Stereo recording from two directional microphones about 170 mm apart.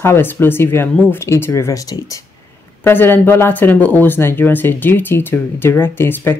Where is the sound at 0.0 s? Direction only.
15° left (ahead or behind).